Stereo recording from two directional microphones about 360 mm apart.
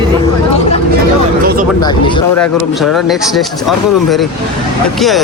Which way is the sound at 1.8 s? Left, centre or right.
Centre.